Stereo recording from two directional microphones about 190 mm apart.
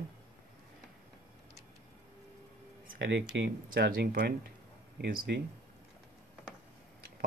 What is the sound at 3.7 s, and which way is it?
Speech, 50° right (ahead or behind).